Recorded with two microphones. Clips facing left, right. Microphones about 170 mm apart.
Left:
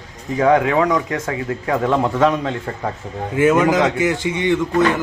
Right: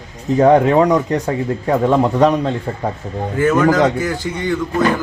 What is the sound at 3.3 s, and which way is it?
Speech, 10° left (ahead or behind).